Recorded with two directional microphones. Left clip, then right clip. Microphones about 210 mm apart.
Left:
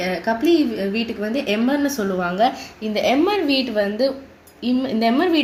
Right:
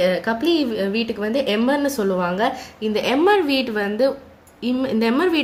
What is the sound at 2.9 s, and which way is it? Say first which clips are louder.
A woman's voice: right 1 dB; 50° right (ahead or behind).